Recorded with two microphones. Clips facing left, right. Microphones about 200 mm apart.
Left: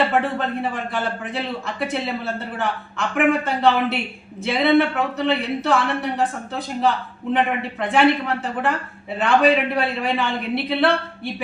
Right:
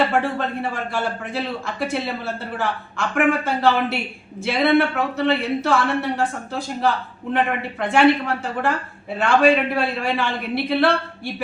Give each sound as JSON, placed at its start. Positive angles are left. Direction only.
{"t": 0.1, "sound": "a man's voice", "side_deg": 0}
{"t": 9.1, "sound": "a man's voice", "side_deg": 0}